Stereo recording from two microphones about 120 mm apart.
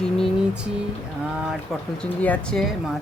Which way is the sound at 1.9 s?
10° left (ahead or behind).